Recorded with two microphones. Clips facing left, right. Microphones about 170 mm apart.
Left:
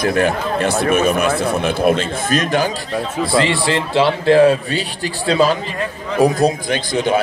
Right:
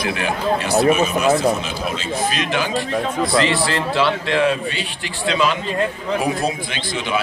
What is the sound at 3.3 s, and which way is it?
A man's voice, 25° left (ahead or behind).